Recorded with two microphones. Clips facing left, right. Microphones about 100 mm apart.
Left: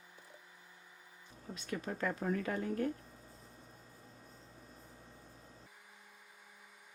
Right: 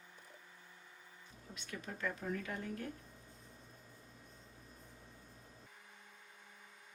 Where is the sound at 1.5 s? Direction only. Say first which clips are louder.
Left 7 dB; 40° left (ahead or behind).